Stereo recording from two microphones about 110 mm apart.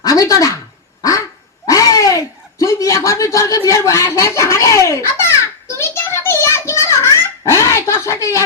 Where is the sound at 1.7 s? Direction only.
30° left (ahead or behind).